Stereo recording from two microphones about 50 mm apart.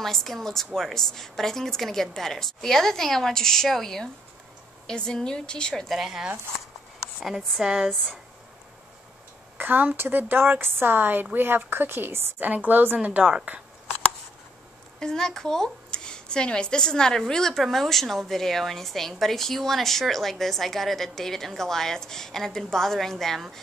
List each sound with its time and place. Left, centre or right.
0.0 s speech: centre
5.9 s speech: centre
9.6 s speech: right
12.4 s a woman's voice: right
15.0 s a woman's voice: centre